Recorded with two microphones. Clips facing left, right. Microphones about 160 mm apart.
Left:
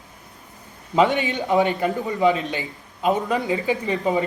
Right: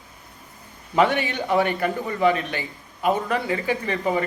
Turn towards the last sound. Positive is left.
turn(degrees=15)  # may be behind; listen again after turning